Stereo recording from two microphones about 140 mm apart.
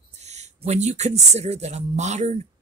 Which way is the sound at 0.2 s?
55° right (ahead or behind).